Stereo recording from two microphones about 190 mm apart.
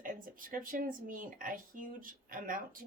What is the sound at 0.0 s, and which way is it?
Speech, 45° right (ahead or behind).